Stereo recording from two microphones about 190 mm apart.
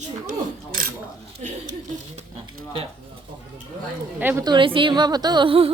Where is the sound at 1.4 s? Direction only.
35° right (ahead or behind).